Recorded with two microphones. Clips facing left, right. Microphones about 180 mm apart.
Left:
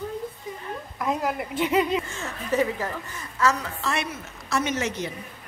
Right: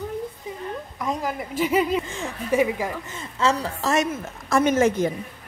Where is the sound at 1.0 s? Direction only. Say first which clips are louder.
Left 1 dB; 5° left (ahead or behind).